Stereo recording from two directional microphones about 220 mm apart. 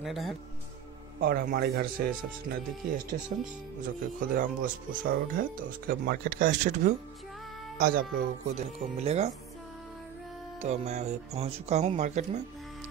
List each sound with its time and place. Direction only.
0.0 s speech: centre (ahead or behind)
1.2 s a man's voice: 45° right (ahead or behind)
7.7 s music: 40° right (ahead or behind)
8.5 s speech: 30° right (ahead or behind)
10.6 s speech: 30° right (ahead or behind)